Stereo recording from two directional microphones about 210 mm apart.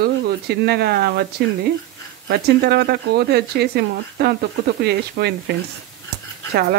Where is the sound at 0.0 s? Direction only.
50° right (ahead or behind).